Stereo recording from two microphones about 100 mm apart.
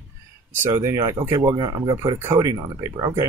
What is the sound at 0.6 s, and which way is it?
Speech, 25° right (ahead or behind).